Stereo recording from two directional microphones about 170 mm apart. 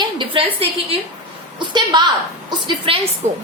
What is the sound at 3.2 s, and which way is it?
Speech, 45° right (ahead or behind).